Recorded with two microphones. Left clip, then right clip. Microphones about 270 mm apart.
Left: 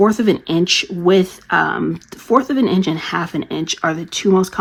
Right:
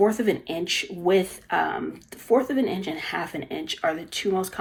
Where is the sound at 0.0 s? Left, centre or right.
Centre.